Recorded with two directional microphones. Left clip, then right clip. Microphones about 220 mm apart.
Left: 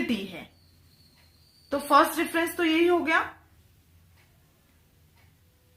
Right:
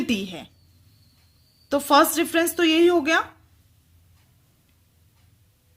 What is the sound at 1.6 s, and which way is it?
A woman's voice, 45° right (ahead or behind).